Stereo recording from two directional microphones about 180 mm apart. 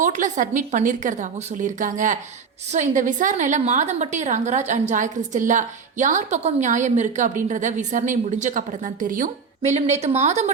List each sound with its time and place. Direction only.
0.0 s a woman's voice: 45° right (ahead or behind)